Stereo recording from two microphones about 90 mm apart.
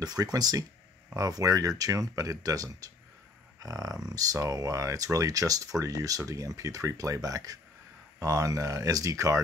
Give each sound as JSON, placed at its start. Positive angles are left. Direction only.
{"t": 0.0, "sound": "speech", "side_deg": -45}